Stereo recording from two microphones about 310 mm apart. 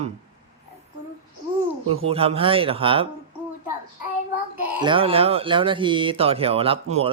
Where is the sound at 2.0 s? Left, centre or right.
Centre.